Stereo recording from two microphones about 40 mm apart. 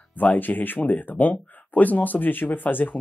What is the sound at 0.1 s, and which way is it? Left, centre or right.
Speech, left.